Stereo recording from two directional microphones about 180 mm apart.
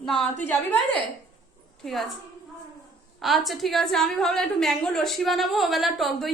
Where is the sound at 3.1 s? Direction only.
Centre (ahead or behind).